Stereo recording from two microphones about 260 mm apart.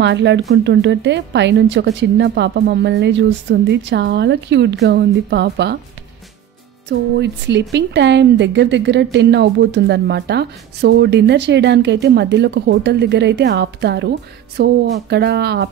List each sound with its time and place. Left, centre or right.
0.0 s a woman's voice: right
6.9 s a woman's voice: right